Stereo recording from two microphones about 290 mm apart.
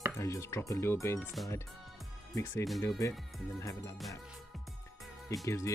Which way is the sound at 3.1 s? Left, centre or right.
Centre.